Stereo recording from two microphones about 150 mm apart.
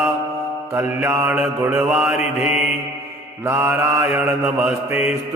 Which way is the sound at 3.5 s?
15° right (ahead or behind).